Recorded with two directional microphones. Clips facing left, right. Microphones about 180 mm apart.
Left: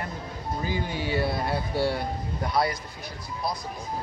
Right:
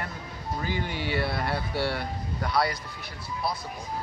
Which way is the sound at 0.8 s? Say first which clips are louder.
Left 2 dB; 40° left (ahead or behind).